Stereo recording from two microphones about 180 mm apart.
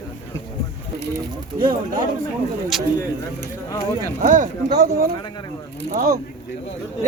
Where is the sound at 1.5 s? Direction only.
25° right (ahead or behind).